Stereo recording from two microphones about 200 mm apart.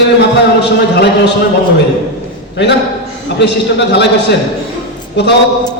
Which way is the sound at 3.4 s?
60° left (ahead or behind).